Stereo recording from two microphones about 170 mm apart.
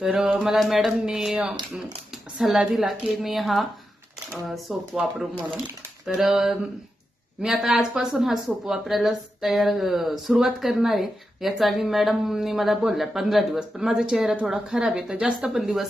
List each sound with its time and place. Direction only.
0.0 s a woman's voice: 5° right (ahead or behind)